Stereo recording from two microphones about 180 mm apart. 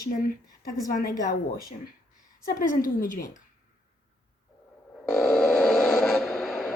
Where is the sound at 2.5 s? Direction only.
50° left (ahead or behind).